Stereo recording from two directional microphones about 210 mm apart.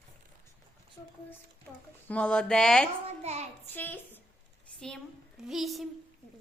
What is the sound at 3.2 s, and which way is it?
Speech, 30° right (ahead or behind).